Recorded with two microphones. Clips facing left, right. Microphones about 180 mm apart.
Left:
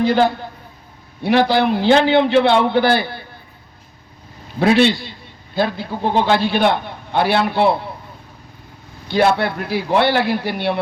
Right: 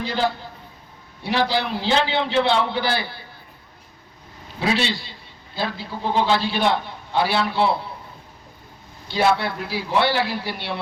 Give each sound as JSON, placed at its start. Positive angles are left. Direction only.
{"t": 0.0, "sound": "a man's voice", "side_deg": 55}
{"t": 4.6, "sound": "a man's voice", "side_deg": 55}
{"t": 9.0, "sound": "a man's voice", "side_deg": 55}